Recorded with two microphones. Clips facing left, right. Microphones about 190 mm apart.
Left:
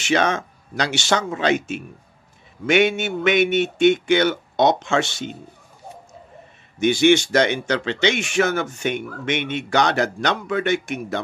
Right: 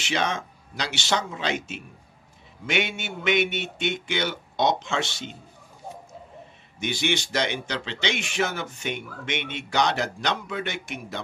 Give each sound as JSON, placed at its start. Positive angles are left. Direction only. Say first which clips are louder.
{"t": 0.0, "sound": "speech", "louder": "left 7 dB", "side_deg": 50}
{"t": 6.8, "sound": "speech", "louder": "left 12 dB", "side_deg": 50}